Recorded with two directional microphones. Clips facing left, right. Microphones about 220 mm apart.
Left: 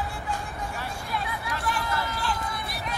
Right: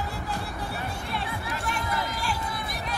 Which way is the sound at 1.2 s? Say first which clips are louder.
Left 1 dB; 25° right (ahead or behind).